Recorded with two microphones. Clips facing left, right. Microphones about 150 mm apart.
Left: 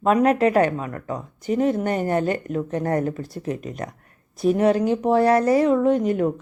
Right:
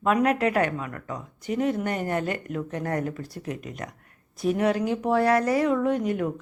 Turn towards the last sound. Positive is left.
turn(degrees=30)  # may be behind; listen again after turning